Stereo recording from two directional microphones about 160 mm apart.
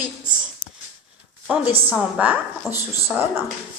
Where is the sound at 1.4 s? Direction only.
5° right (ahead or behind).